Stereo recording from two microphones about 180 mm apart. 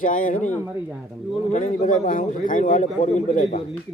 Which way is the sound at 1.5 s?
45° left (ahead or behind).